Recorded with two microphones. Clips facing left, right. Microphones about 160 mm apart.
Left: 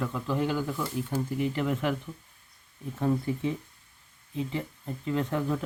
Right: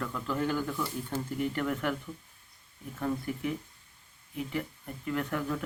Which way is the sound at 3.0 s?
25° left (ahead or behind).